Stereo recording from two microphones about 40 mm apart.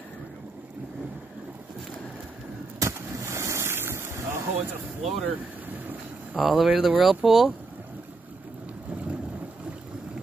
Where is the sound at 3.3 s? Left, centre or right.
Right.